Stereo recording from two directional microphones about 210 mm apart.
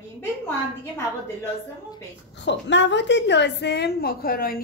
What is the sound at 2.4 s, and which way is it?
A woman's voice, 55° left (ahead or behind).